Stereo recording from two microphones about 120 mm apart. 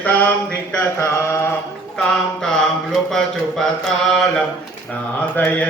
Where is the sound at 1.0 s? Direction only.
20° left (ahead or behind).